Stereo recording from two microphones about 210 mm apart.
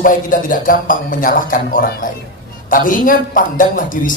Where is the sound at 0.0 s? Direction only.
40° left (ahead or behind).